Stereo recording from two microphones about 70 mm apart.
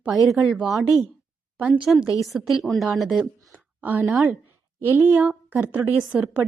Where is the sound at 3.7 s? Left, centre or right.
Right.